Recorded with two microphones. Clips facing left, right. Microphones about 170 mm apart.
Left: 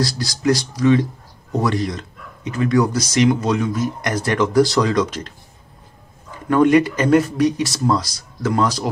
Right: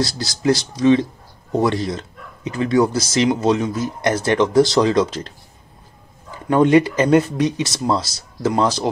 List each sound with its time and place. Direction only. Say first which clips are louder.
0.0 s speech: even; 25° right (ahead or behind)
6.5 s speech: even; 25° right (ahead or behind)